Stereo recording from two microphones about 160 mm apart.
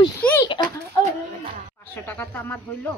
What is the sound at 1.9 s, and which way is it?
A woman's voice, 15° left (ahead or behind).